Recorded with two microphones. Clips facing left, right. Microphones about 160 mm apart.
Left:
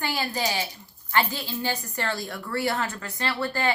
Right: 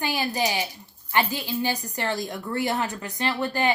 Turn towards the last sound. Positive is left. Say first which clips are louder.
# right 2 dB
turn(degrees=-15)  # may be behind; listen again after turning